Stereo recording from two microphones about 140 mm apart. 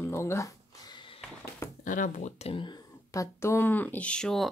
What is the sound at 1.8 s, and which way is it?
Speech, 70° left (ahead or behind).